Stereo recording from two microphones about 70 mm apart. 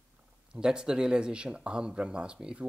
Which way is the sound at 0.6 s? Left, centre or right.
Centre.